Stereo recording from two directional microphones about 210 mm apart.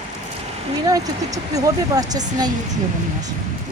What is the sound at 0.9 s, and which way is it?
Speech, 15° right (ahead or behind).